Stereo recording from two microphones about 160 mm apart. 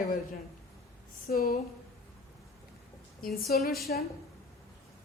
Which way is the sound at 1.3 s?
70° left (ahead or behind).